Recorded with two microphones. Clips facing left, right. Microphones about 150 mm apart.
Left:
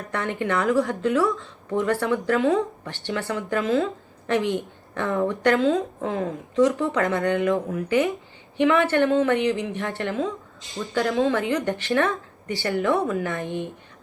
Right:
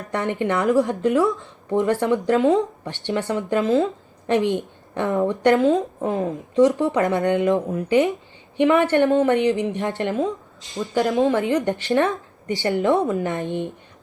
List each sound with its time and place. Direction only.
0.1 s speech: 20° right (ahead or behind)